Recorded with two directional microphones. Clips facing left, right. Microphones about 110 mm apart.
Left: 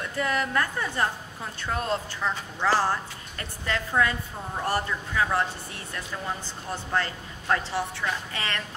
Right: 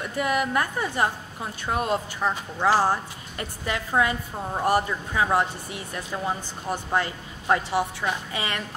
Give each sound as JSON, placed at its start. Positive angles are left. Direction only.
{"t": 0.0, "sound": "a woman's voice", "side_deg": -15}